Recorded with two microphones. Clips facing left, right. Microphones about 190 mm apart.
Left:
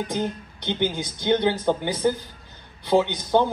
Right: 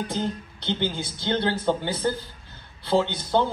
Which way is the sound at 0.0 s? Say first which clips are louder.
Left 1 dB; 15° left (ahead or behind).